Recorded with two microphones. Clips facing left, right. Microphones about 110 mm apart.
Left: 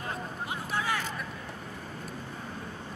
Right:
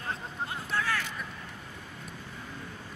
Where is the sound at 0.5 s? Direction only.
15° left (ahead or behind).